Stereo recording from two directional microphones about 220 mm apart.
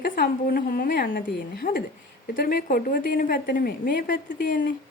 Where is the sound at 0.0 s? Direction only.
40° left (ahead or behind).